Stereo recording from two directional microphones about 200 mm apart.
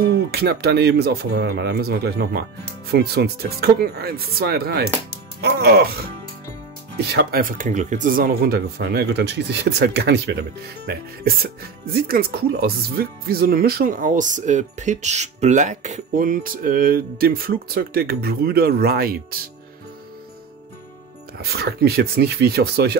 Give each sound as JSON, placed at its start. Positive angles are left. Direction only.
{"t": 0.1, "sound": "speech", "side_deg": -50}
{"t": 7.0, "sound": "speech", "side_deg": -55}
{"t": 21.4, "sound": "speech", "side_deg": -50}